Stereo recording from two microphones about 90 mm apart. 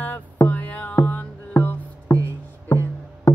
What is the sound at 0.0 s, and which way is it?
Music, 20° left (ahead or behind).